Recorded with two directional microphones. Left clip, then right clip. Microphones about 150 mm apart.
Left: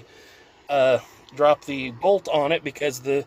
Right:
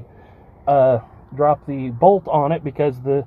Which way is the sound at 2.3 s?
35° right (ahead or behind).